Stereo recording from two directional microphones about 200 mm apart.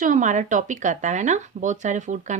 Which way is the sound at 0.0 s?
40° right (ahead or behind).